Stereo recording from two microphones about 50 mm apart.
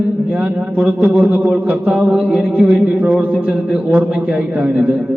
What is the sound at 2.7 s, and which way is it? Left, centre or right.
A man's voice, right.